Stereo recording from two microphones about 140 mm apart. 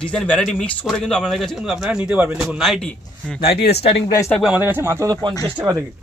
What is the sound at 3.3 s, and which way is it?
Speech, 40° left (ahead or behind).